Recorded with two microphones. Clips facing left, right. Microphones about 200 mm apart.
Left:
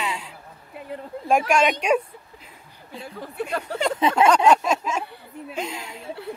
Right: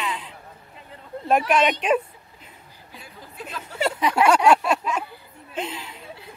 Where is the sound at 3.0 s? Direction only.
65° left (ahead or behind).